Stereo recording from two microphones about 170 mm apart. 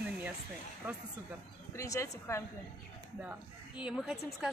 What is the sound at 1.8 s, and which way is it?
Speech, 15° left (ahead or behind).